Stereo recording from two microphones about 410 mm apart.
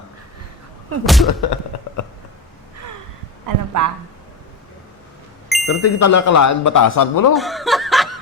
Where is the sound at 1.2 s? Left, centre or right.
Left.